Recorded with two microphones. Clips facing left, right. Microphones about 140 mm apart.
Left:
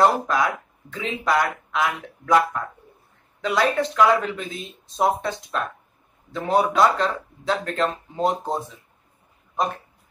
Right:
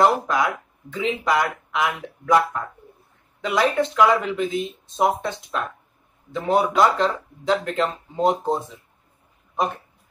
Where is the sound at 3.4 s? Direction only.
20° right (ahead or behind).